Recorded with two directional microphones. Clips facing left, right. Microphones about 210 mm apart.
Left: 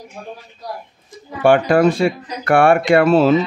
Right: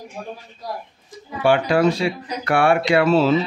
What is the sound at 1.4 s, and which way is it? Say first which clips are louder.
Speech: left 4 dB; 50° left (ahead or behind).